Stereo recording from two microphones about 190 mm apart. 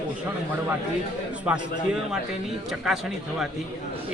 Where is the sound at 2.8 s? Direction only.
Centre (ahead or behind).